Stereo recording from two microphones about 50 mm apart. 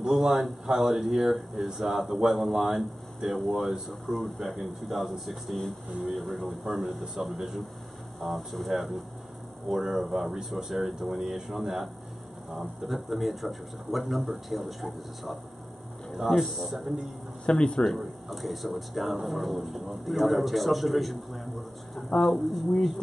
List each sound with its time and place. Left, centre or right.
0.0 s speech: centre
17.5 s speech: centre
17.8 s speech: centre